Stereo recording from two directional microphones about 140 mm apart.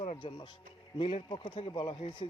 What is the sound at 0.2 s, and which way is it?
A man's voice, 35° left (ahead or behind).